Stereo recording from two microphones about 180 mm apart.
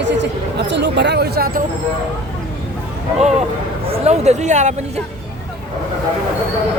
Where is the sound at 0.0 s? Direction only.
75° right (ahead or behind); by 1.6 s 55° right (ahead or behind).